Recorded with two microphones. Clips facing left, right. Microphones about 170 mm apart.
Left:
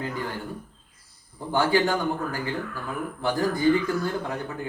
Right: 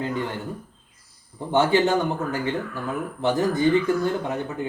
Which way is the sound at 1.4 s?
20° right (ahead or behind).